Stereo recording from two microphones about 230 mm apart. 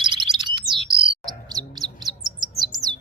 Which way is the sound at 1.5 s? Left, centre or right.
Centre.